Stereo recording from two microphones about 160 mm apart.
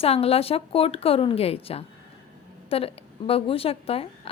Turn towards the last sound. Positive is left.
turn(degrees=40)  # may be behind; listen again after turning